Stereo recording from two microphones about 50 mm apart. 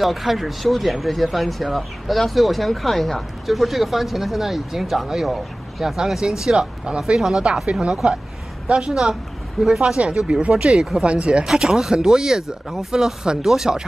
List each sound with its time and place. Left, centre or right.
0.0 s speech: centre; by 11.4 s right
11.4 s speech: centre